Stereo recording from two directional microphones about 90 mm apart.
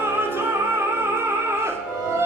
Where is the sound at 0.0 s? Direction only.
25° right (ahead or behind).